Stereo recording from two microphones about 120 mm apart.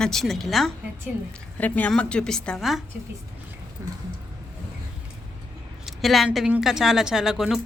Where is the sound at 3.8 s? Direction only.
25° right (ahead or behind).